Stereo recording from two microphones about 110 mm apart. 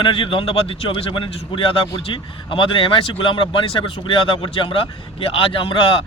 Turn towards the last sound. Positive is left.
turn(degrees=55)  # may be behind; listen again after turning